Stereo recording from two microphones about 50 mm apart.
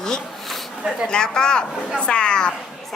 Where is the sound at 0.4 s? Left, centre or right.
Centre.